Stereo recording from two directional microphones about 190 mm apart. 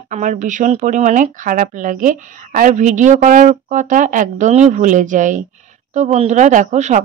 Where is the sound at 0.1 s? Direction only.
40° right (ahead or behind).